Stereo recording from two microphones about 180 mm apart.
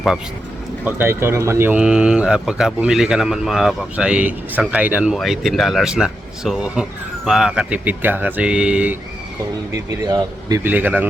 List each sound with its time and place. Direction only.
0.9 s speech: 10° right (ahead or behind)
9.7 s speech: 20° right (ahead or behind)
10.6 s a man's voice: 10° right (ahead or behind)